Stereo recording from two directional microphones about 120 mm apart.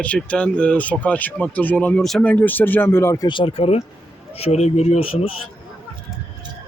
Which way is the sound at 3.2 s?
45° left (ahead or behind).